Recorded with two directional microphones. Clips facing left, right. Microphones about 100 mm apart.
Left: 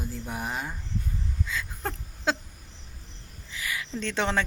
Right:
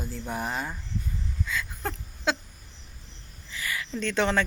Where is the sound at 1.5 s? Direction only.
30° left (ahead or behind).